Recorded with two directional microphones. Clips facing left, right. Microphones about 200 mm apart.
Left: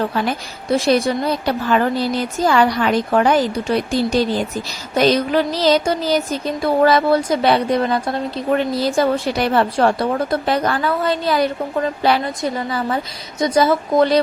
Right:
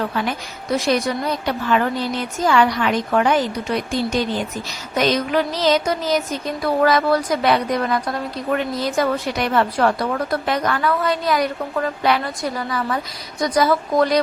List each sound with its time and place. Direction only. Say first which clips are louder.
0.3 s a woman's voice: left 3 dB; 30° left (ahead or behind)